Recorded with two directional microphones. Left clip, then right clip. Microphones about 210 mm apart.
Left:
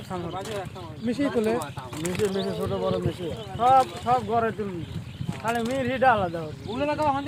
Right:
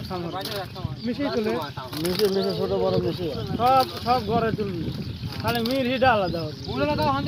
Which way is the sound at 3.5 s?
45° right (ahead or behind).